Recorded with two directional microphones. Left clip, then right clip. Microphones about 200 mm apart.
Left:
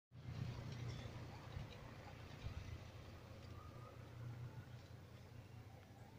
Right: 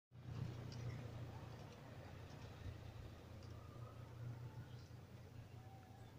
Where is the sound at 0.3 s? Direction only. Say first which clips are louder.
Left 1 dB; 40° right (ahead or behind).